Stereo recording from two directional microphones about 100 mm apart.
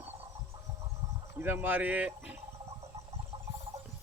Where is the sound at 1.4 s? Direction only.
20° right (ahead or behind).